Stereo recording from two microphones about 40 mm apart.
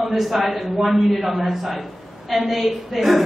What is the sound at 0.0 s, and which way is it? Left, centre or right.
A man's voice, centre.